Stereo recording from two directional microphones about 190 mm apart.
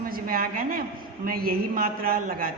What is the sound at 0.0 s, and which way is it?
A woman's voice, 50° right (ahead or behind).